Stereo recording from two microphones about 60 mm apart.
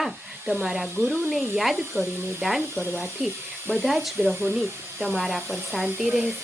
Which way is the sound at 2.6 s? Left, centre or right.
Right.